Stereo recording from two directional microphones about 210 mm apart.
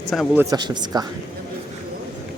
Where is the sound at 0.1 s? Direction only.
Centre (ahead or behind).